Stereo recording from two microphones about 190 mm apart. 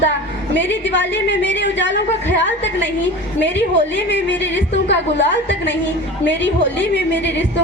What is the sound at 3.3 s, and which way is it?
A woman's voice, 65° left (ahead or behind).